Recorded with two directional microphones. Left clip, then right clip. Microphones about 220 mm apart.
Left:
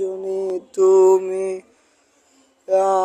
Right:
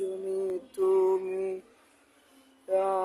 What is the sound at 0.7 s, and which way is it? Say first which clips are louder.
Mantra: left 12 dB; 30° left (ahead or behind).